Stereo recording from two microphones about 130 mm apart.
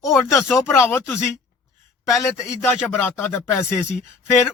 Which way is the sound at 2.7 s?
15° left (ahead or behind).